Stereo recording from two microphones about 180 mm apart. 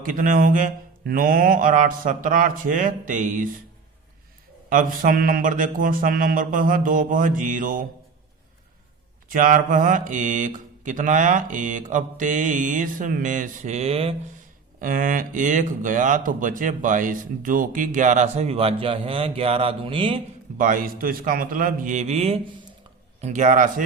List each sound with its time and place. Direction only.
0.0 s speech: 50° right (ahead or behind)
4.7 s speech: 50° right (ahead or behind)
9.3 s speech: 50° right (ahead or behind); by 14.2 s 35° right (ahead or behind)
14.8 s speech: 50° right (ahead or behind); by 20.2 s 30° right (ahead or behind)
20.6 s speech: 50° right (ahead or behind)